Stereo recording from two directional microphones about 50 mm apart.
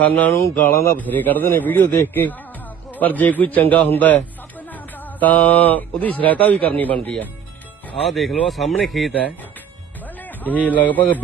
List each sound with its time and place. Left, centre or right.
0.1 s a man's voice: left
0.5 s speech: left
0.9 s a man's voice: left
8.0 s speech: centre
10.2 s speech: left